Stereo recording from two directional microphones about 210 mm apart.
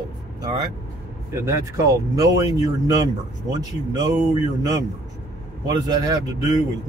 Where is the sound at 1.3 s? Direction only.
15° right (ahead or behind).